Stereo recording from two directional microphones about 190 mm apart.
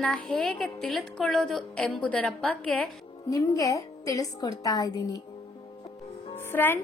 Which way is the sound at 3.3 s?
15° left (ahead or behind).